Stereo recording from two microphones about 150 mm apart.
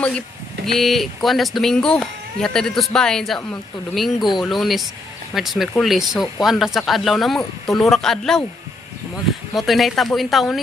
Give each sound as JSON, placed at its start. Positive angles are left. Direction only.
{"t": 0.7, "sound": "speech", "side_deg": 0}
{"t": 9.6, "sound": "speech", "side_deg": 0}